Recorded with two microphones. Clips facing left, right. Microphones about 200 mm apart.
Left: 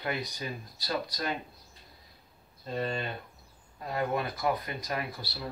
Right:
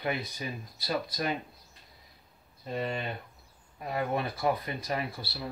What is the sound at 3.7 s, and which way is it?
Speech, 15° right (ahead or behind).